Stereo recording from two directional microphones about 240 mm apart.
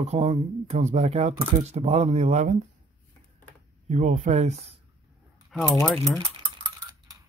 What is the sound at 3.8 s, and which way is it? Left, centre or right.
Speech, right.